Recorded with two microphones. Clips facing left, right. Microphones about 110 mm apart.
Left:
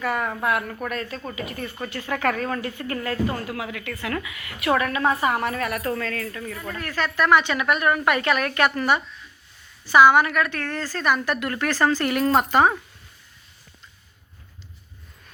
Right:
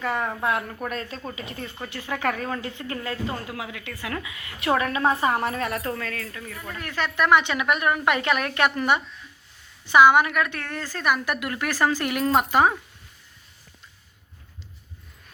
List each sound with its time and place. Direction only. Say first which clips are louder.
0.0 s speech: left 1 dB; 25° right (ahead or behind)
0.9 s speech: left 2 dB; 30° right (ahead or behind)
5.9 s speech: left 4 dB; 10° right (ahead or behind)